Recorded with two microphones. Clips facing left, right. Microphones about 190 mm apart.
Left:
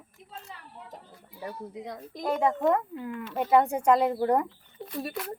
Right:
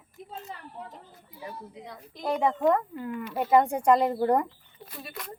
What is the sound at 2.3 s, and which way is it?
A woman's voice, 5° left (ahead or behind).